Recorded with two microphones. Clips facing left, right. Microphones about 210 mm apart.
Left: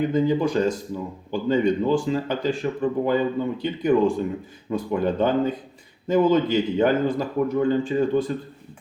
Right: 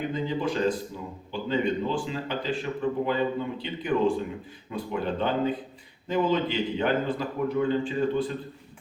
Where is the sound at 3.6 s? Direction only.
45° left (ahead or behind).